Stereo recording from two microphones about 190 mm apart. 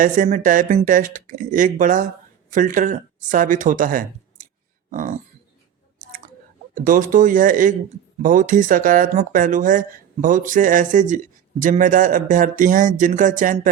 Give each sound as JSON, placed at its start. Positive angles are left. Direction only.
{"t": 0.0, "sound": "speech", "side_deg": -45}
{"t": 4.9, "sound": "a sound", "side_deg": -45}
{"t": 6.8, "sound": "speech", "side_deg": -45}